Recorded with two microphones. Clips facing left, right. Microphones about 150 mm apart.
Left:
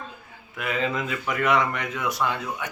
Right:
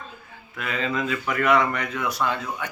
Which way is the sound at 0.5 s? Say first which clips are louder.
Left 1 dB; 15° left (ahead or behind).